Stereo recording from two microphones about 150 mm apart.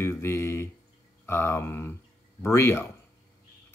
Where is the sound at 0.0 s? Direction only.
20° left (ahead or behind).